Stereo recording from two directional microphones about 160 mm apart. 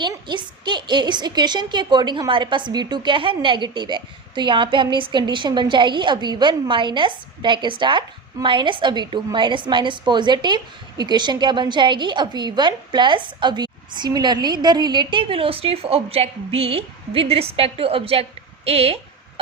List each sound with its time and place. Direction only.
0.0 s a woman's voice: 30° right (ahead or behind)